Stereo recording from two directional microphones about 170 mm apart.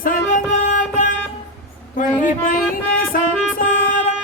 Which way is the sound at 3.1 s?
55° left (ahead or behind).